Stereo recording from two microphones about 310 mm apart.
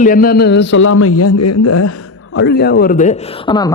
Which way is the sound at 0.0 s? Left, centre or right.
Left.